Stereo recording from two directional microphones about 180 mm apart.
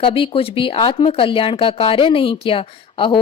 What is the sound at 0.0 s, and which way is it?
Speech, 30° left (ahead or behind).